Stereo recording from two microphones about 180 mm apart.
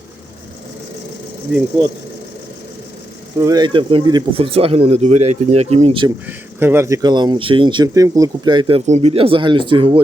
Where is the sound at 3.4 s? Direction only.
20° right (ahead or behind).